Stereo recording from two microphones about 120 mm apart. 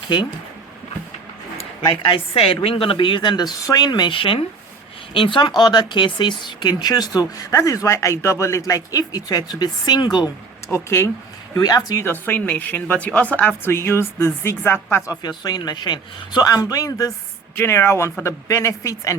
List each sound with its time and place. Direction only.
1.5 s a woman's voice: 45° left (ahead or behind)
10.7 s speech: 20° left (ahead or behind)
15.1 s speech: 35° left (ahead or behind)